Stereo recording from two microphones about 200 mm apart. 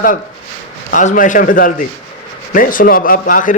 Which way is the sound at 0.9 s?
40° left (ahead or behind).